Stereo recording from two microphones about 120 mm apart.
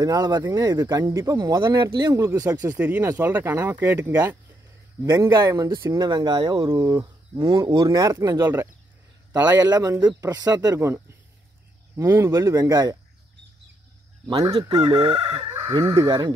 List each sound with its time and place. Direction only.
0.0 s speech: 30° right (ahead or behind)
2.8 s speech: 15° right (ahead or behind)
6.0 s speech: 40° right (ahead or behind)
8.3 s speech: 20° right (ahead or behind)
9.3 s speech: 30° right (ahead or behind)
11.9 s speech: 20° right (ahead or behind)
14.2 s speech: 30° right (ahead or behind)
14.8 s chicken: 45° right (ahead or behind)
15.8 s speech: 25° right (ahead or behind)